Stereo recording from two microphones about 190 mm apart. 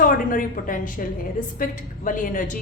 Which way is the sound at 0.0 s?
45° left (ahead or behind).